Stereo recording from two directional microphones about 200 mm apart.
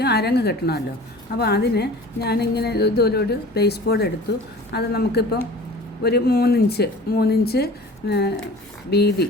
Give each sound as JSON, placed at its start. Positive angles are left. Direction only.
{"t": 0.0, "sound": "a woman's voice", "side_deg": 55}